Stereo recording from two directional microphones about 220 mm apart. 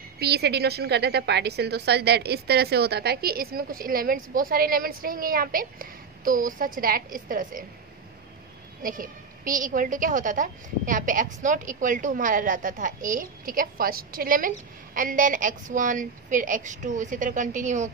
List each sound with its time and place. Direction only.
0.2 s a woman's voice: 50° right (ahead or behind)
8.8 s a woman's voice: 40° right (ahead or behind)